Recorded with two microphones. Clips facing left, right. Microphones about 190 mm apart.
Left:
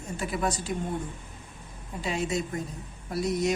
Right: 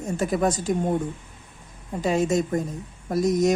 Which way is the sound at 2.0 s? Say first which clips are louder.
Right 8 dB; 45° right (ahead or behind).